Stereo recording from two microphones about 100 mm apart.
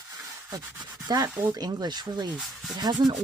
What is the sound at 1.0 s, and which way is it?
Speech, 40° right (ahead or behind).